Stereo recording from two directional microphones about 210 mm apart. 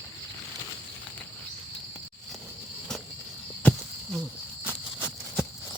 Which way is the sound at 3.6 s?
5° left (ahead or behind).